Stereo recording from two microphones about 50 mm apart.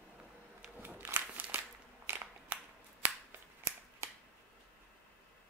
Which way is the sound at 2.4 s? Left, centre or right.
Right.